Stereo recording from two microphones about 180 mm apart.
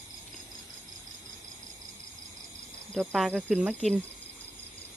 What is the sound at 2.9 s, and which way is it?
Speech, centre (ahead or behind).